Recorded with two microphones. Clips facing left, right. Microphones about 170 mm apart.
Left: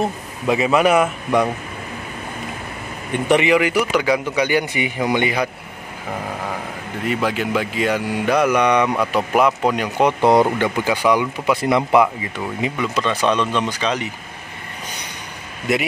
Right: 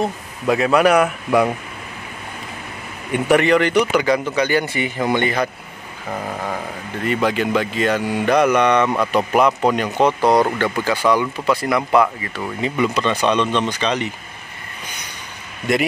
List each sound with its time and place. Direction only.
0.0 s speech: centre (ahead or behind)
3.3 s speech: 5° left (ahead or behind)
7.1 s speech: 5° left (ahead or behind)
10.2 s speech: 20° left (ahead or behind)
12.7 s speech: centre (ahead or behind)
15.7 s speech: 5° left (ahead or behind)